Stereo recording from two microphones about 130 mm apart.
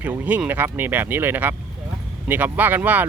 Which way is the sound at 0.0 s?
15° right (ahead or behind).